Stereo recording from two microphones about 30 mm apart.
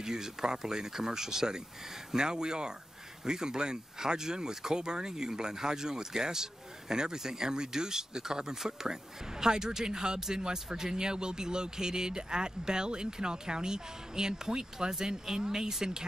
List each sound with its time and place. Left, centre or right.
0.0 s speech: right